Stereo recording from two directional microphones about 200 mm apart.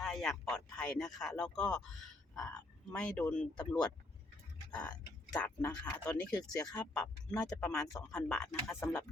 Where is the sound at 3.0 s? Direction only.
5° left (ahead or behind).